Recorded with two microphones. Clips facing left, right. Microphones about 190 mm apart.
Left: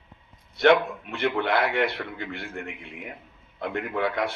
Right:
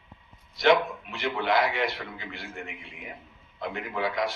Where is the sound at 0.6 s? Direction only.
60° left (ahead or behind).